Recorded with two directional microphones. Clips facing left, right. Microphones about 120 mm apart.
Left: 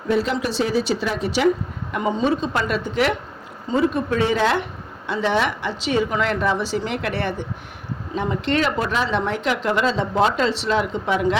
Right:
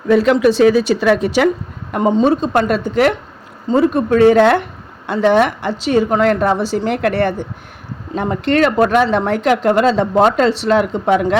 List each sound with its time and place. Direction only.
0.1 s speech: 80° right; by 1.5 s 60° right (ahead or behind)
1.9 s speech: 45° right (ahead or behind)